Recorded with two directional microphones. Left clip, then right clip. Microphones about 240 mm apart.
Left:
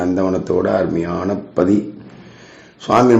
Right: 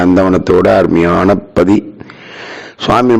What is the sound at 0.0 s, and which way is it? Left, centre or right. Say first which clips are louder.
A man's voice: right 8 dB; right.